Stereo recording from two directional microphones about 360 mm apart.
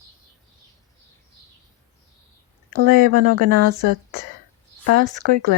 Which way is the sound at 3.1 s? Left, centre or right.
Right.